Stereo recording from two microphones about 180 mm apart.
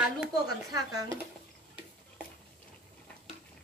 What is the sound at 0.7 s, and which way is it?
Speech, 20° right (ahead or behind).